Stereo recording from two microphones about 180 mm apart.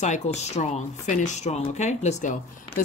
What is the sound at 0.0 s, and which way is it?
A woman's voice, 40° left (ahead or behind).